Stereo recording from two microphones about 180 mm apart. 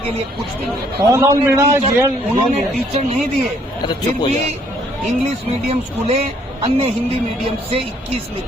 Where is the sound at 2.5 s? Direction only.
35° right (ahead or behind).